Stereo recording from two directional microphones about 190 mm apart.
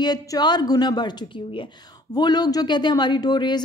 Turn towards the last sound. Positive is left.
turn(degrees=20)  # may be behind; listen again after turning